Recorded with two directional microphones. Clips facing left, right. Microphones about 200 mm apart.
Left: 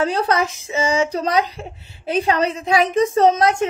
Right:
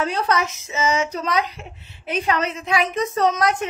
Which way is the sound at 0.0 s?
30° left (ahead or behind).